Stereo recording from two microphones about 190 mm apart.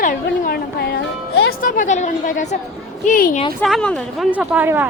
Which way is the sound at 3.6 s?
5° left (ahead or behind).